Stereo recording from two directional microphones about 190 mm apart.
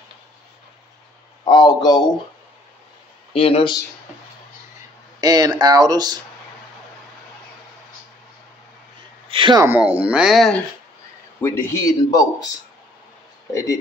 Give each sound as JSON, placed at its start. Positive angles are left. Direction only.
{"t": 1.4, "sound": "a man's voice", "side_deg": 20}
{"t": 3.3, "sound": "speech", "side_deg": 30}
{"t": 5.2, "sound": "speech", "side_deg": -20}
{"t": 9.3, "sound": "a sound", "side_deg": -25}
{"t": 9.7, "sound": "speech", "side_deg": -10}
{"t": 11.4, "sound": "a man's voice", "side_deg": 15}
{"t": 13.5, "sound": "speech", "side_deg": 15}